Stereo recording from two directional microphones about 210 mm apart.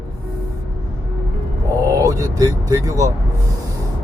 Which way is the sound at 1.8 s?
15° right (ahead or behind).